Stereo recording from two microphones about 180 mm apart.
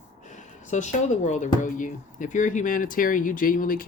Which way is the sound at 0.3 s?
40° left (ahead or behind).